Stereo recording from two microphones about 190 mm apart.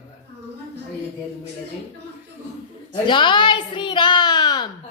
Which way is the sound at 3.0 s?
25° left (ahead or behind).